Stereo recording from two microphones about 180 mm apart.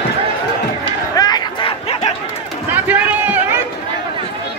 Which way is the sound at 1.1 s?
20° left (ahead or behind).